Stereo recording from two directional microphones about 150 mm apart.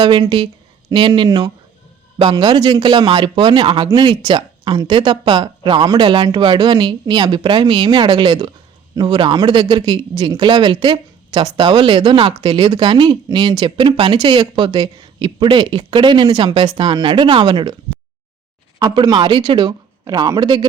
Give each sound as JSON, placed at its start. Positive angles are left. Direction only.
{"t": 0.0, "sound": "a man's voice", "side_deg": -30}
{"t": 18.8, "sound": "a man's voice", "side_deg": -25}